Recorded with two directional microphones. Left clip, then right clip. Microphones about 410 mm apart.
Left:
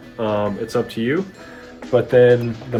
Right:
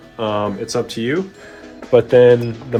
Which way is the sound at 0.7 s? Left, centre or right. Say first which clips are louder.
Right 1 dB; right.